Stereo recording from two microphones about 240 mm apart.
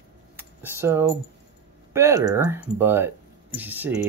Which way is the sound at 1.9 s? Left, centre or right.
Centre.